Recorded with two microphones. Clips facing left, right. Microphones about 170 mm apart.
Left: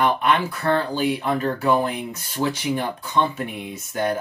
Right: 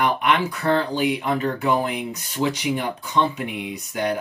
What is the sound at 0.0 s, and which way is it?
Speech, 15° right (ahead or behind).